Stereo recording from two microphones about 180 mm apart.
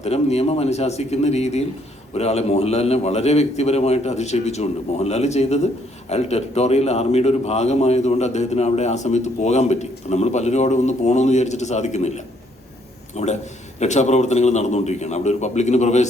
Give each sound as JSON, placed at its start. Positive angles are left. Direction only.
{"t": 0.0, "sound": "a man's voice", "side_deg": 35}